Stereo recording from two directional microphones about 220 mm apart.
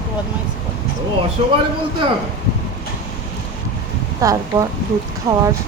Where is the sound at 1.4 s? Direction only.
25° right (ahead or behind).